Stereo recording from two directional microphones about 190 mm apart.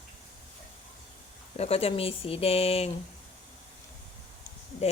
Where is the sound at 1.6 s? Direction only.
30° left (ahead or behind).